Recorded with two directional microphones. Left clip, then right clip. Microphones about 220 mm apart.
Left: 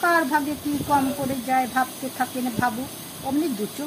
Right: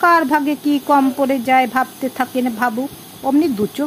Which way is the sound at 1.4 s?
35° right (ahead or behind).